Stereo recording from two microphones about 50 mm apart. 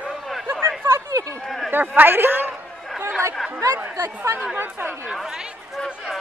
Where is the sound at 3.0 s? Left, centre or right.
Right.